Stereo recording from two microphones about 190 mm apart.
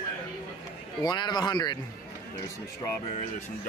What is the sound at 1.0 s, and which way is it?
Speech, 20° left (ahead or behind).